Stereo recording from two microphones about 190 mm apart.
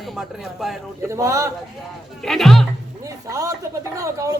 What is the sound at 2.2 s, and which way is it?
Speech, centre (ahead or behind).